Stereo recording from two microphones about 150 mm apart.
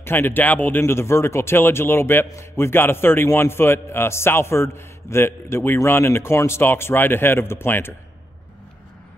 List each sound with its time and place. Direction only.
0.0 s speech: 15° left (ahead or behind)